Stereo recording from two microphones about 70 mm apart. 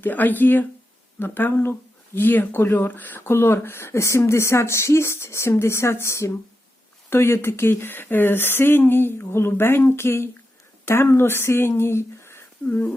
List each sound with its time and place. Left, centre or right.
0.0 s speech: left
12.6 s speech: left